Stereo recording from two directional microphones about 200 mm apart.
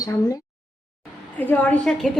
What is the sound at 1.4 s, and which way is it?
Speech, 10° left (ahead or behind).